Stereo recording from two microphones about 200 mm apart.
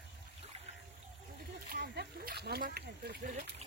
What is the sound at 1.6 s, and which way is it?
Speech, 55° right (ahead or behind).